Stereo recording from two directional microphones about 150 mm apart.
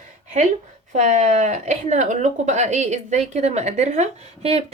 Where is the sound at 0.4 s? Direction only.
50° right (ahead or behind).